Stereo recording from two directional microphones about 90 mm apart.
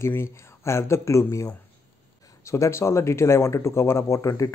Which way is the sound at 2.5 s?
30° left (ahead or behind).